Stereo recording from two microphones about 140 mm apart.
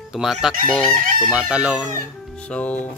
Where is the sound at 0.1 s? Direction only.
5° right (ahead or behind).